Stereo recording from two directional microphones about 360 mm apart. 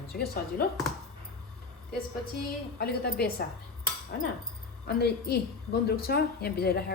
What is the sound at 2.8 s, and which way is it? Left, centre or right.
Speech, left.